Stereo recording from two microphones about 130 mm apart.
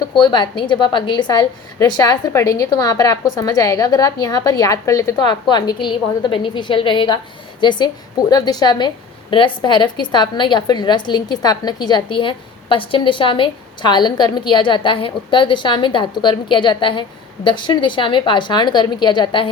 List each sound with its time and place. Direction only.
0.0 s a woman's voice: 35° left (ahead or behind)